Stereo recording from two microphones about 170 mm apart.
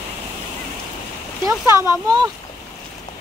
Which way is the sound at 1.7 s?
15° right (ahead or behind).